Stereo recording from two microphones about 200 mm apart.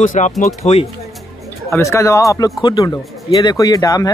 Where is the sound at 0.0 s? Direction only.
40° left (ahead or behind).